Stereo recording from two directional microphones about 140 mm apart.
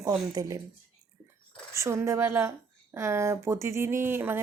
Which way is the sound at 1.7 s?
20° right (ahead or behind).